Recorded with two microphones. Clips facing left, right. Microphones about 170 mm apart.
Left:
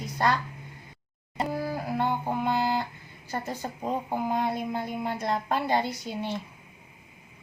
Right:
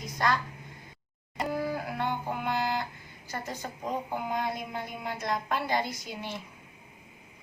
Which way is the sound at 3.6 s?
30° left (ahead or behind).